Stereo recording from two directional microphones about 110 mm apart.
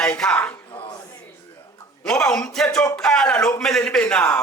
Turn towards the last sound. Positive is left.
turn(degrees=10)  # may be behind; listen again after turning